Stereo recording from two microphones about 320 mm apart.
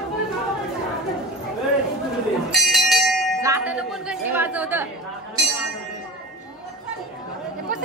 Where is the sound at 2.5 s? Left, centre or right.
Centre.